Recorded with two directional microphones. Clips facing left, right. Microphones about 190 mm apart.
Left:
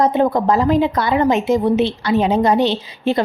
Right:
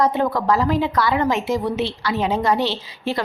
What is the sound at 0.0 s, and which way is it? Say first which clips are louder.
A woman's voice: left 4 dB; 20° left (ahead or behind).